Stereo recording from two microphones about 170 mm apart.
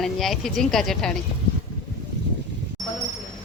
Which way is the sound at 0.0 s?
Centre (ahead or behind).